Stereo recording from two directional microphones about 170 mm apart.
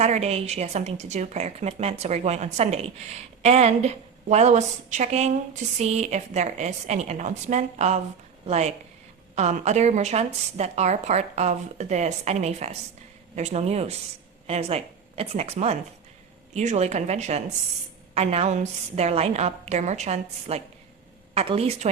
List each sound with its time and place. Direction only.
0.0 s a woman's voice: 40° right (ahead or behind)